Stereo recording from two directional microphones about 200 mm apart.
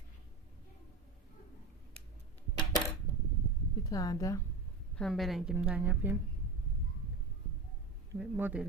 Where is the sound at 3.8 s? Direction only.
20° left (ahead or behind).